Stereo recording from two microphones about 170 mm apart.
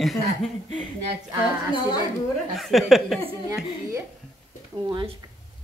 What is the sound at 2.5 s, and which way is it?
Speech, centre (ahead or behind).